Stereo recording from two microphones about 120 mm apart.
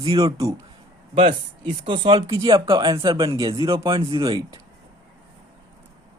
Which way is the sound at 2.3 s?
30° right (ahead or behind).